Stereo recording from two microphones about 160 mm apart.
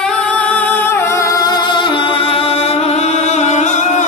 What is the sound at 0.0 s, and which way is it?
Music, 5° left (ahead or behind).